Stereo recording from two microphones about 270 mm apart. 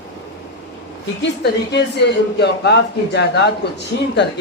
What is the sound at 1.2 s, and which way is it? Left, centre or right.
Speech, left.